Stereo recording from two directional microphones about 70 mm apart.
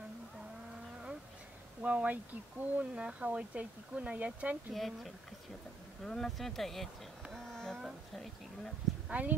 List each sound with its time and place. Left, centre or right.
1.8 s speech: centre
4.7 s speech: centre
7.3 s a sound: centre
9.1 s speech: right